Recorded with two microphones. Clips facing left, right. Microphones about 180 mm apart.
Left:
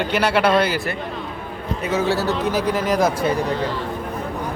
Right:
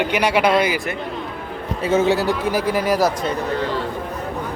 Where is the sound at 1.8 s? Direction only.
20° right (ahead or behind); by 3.1 s 5° right (ahead or behind).